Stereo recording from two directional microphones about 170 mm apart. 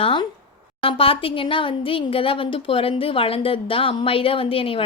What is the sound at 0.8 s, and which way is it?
Speech, 35° left (ahead or behind).